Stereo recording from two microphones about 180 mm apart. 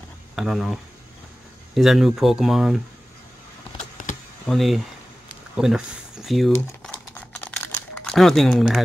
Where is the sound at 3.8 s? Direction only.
45° left (ahead or behind).